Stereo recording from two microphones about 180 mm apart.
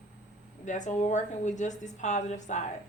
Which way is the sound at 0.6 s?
45° left (ahead or behind).